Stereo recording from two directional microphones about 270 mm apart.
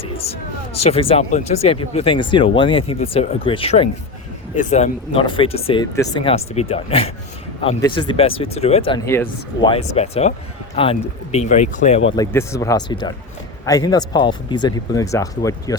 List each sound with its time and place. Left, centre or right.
0.8 s speech: left
8.9 s speech: centre
12.1 s speech: centre